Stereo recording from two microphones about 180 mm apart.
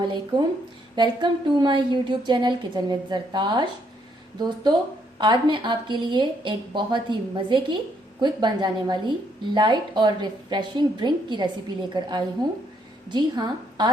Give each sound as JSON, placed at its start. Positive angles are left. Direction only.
{"t": 0.0, "sound": "a woman's voice", "side_deg": -25}